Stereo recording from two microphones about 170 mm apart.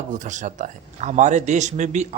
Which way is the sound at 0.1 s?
45° right (ahead or behind).